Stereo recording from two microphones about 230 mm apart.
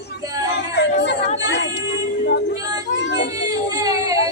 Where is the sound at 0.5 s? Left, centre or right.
Left.